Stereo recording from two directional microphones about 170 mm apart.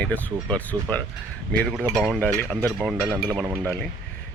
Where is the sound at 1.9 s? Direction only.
Centre (ahead or behind).